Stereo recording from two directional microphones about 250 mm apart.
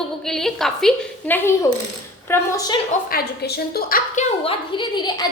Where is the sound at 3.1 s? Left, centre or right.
Left.